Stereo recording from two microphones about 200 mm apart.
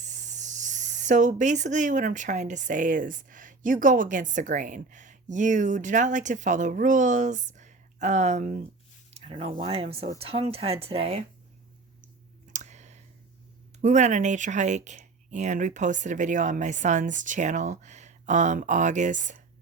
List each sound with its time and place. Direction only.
0.0 s speech: 35° right (ahead or behind)
12.5 s clicking: 35° right (ahead or behind)
13.8 s speech: 35° right (ahead or behind)